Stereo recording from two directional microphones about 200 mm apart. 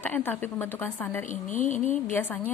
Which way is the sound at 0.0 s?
10° left (ahead or behind).